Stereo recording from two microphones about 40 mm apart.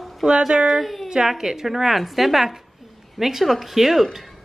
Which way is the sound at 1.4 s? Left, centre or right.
Centre.